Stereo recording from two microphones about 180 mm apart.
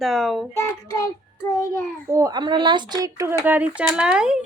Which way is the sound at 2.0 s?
20° right (ahead or behind).